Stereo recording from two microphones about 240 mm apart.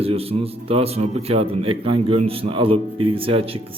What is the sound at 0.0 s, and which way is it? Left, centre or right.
A man's voice, right.